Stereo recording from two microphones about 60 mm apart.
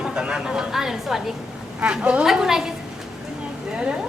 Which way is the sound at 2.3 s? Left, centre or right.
Centre.